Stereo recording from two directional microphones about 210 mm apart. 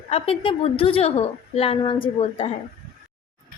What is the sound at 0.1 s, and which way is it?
A woman's voice, 30° left (ahead or behind).